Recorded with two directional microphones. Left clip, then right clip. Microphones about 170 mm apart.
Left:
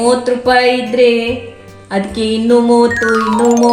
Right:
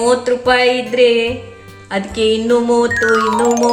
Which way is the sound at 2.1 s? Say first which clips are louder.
Left 1 dB; centre (ahead or behind).